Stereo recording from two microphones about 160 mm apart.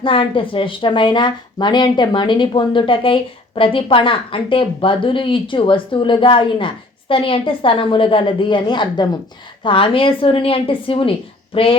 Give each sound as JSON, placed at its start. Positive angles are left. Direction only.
{"t": 0.0, "sound": "speech", "side_deg": 30}